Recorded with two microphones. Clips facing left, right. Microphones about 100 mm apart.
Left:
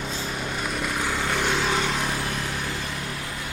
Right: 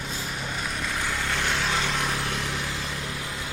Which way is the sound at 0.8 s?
15° left (ahead or behind).